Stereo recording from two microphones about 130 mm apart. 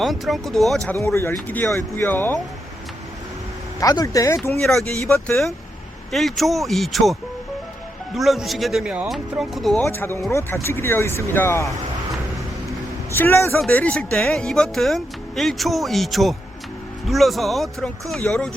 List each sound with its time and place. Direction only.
0.0 s speech: centre (ahead or behind)
1.1 s speech: 20° left (ahead or behind)
3.8 s speech: 25° left (ahead or behind)
4.6 s speech: 5° left (ahead or behind)
9.8 s speech: 15° left (ahead or behind)
13.1 s speech: 15° left (ahead or behind)